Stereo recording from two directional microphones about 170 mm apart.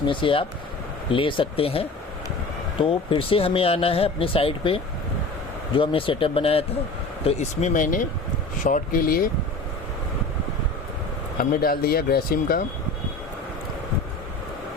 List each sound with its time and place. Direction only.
0.0 s speech: 30° left (ahead or behind); by 9.3 s 60° left (ahead or behind)
11.3 s speech: 60° left (ahead or behind)